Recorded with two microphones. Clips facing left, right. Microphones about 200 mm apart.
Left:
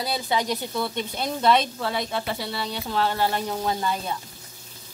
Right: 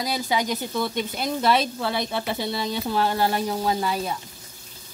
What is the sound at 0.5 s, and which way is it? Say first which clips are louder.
A woman's voice: right 1 dB; centre (ahead or behind).